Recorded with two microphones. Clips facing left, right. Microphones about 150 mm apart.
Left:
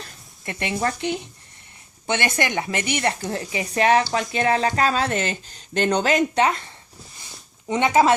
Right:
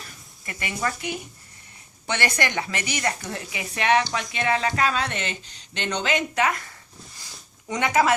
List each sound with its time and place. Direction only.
0.8 s speech: 40° left (ahead or behind)
2.0 s speech: 20° left (ahead or behind)
3.0 s speech: 30° left (ahead or behind)